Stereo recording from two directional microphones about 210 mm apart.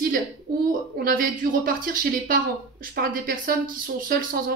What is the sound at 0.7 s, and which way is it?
Speech, 40° right (ahead or behind).